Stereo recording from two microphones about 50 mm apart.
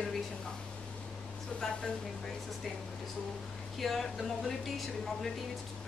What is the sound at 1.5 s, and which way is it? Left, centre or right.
Speech, left.